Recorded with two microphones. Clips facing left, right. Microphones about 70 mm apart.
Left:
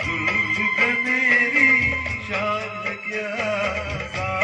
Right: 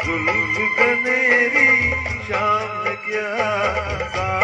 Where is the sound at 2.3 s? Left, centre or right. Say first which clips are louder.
Right 6 dB; right.